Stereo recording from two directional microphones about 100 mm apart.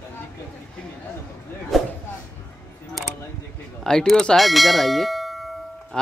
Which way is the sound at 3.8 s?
5° left (ahead or behind).